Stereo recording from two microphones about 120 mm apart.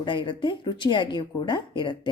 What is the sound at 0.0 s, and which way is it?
Speech, 40° left (ahead or behind).